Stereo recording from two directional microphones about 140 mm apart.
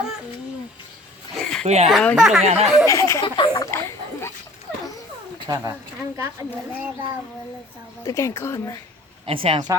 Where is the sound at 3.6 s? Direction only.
20° left (ahead or behind).